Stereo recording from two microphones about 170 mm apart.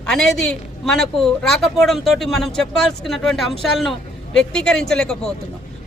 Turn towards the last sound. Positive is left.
turn(degrees=5)  # may be behind; listen again after turning